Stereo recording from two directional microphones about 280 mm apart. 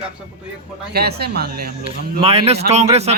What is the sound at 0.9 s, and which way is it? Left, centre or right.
Speech, right.